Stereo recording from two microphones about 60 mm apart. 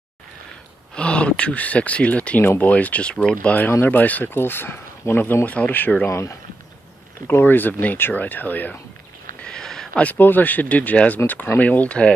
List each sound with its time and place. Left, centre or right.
0.9 s speech: centre
3.8 s speech: left
5.3 s speech: left
6.0 s speech: left
7.2 s speech: left
9.4 s a sound: centre
9.9 s speech: left